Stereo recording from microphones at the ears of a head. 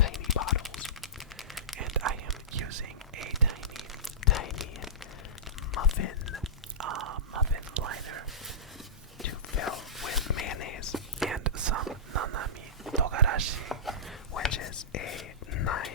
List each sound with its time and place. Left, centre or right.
0.0 s a sound: left
1.8 s whispering: right
4.2 s tearing: left
5.7 s whispering: left
6.7 s whispering: right
9.2 s whispering: left
11.3 s whispering: right
13.0 s a sound: right
14.3 s whispering: left